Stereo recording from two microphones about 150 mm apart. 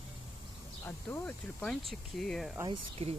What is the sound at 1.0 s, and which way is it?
Speech, 15° left (ahead or behind).